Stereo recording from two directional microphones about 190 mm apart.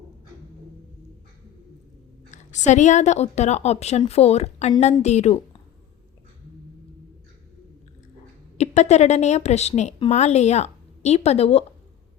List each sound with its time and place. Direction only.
2.3 s a woman's voice: 40° left (ahead or behind)
8.5 s speech: 35° left (ahead or behind)